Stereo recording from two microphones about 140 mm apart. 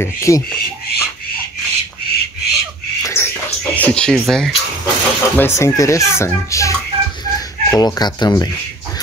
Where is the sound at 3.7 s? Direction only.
10° left (ahead or behind).